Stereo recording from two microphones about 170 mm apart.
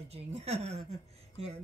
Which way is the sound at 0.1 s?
40° right (ahead or behind).